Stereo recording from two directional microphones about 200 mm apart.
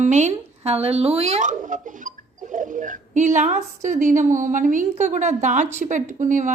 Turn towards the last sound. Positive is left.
turn(degrees=-40)  # may be behind; listen again after turning